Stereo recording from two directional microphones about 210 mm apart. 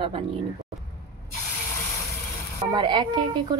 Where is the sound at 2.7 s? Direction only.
20° right (ahead or behind).